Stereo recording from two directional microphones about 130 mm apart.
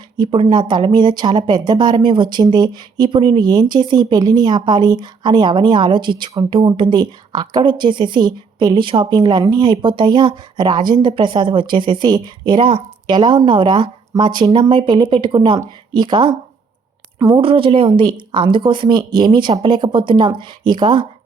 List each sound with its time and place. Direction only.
0.2 s a woman's voice: 40° right (ahead or behind)
17.3 s a woman's voice: 45° right (ahead or behind)